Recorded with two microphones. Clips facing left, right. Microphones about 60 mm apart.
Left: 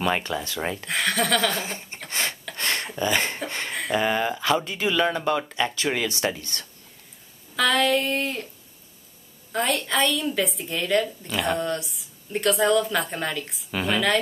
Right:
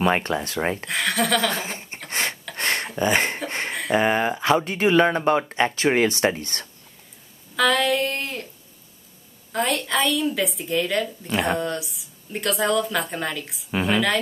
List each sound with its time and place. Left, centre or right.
0.3 s speech: right
0.8 s speech: centre
1.5 s speech: centre
2.0 s a sound: right
3.0 s speech: right
3.4 s a sound: right
3.9 s speech: right
7.5 s speech: centre
9.5 s speech: centre